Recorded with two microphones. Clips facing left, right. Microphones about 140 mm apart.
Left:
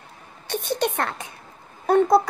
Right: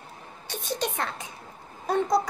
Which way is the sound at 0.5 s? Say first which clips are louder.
Left 6 dB; 60° left (ahead or behind).